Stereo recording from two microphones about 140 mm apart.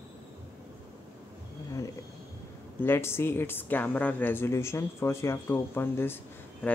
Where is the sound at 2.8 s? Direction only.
15° left (ahead or behind).